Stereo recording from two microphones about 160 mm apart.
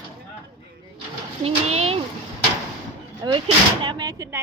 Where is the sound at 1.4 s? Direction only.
40° right (ahead or behind).